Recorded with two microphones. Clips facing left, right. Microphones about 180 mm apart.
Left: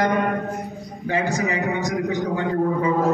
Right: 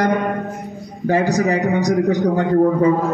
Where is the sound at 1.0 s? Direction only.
40° right (ahead or behind).